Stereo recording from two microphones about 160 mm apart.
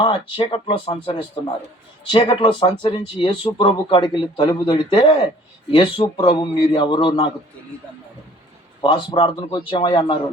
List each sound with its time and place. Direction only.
0.0 s speech: 35° left (ahead or behind)
8.8 s speech: 30° left (ahead or behind)